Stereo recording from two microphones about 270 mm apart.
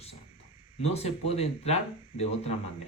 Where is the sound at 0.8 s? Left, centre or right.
Left.